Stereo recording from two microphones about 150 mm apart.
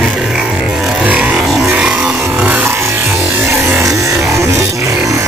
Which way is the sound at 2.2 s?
10° right (ahead or behind).